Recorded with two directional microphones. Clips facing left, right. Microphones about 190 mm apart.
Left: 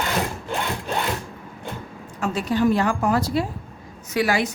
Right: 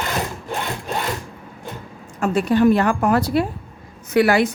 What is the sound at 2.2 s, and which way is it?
A woman's voice, 55° right (ahead or behind).